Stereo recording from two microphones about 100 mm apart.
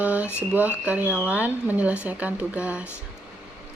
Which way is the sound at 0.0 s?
15° right (ahead or behind).